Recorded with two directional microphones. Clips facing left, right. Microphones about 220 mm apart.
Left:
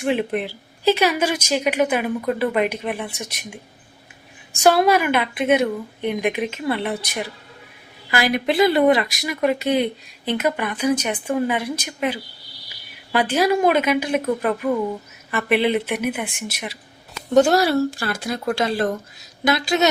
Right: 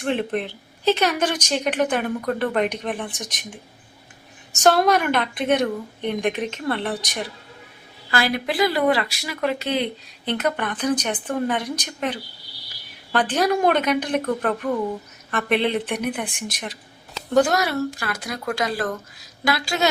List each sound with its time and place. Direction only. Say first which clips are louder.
0.0 s speech: left 2 dB; 10° left (ahead or behind)
4.6 s a woman's voice: left 2 dB; 10° left (ahead or behind)
17.3 s speech: left 4 dB; 25° left (ahead or behind)